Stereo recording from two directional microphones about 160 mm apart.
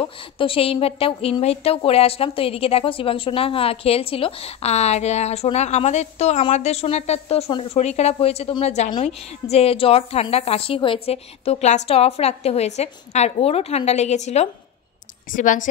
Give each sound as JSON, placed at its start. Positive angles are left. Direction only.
{"t": 0.4, "sound": "a woman's voice", "side_deg": 35}